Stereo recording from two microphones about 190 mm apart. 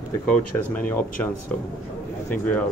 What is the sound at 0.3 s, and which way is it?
Speech, 10° left (ahead or behind).